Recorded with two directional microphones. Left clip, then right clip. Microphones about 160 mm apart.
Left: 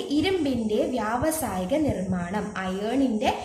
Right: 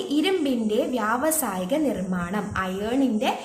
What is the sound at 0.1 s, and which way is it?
A woman's voice, 30° right (ahead or behind).